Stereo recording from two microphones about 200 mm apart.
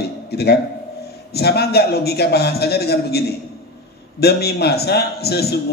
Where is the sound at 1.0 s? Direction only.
55° left (ahead or behind).